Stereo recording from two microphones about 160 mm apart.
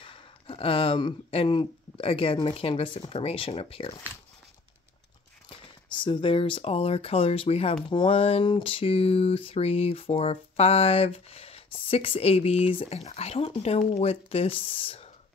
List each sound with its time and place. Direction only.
0.0 s speech: 35° left (ahead or behind)
5.9 s speech: 30° left (ahead or behind)